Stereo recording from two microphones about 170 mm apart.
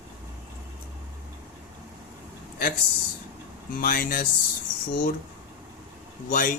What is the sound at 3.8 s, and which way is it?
Speech, 60° left (ahead or behind).